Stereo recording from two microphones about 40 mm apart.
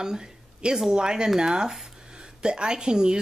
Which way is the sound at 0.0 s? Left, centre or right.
Centre.